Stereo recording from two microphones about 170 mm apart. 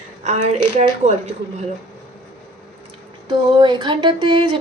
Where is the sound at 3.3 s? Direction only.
30° right (ahead or behind).